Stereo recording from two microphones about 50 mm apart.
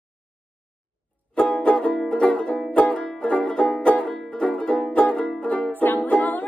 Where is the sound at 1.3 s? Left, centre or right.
Left.